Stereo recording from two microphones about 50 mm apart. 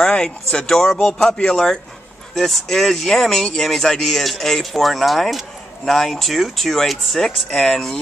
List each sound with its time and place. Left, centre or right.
0.0 s speech: centre